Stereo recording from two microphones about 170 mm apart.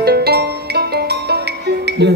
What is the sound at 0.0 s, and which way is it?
Music, 70° right (ahead or behind).